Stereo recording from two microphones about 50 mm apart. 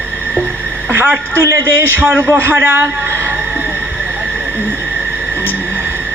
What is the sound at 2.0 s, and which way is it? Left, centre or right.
Speech, right.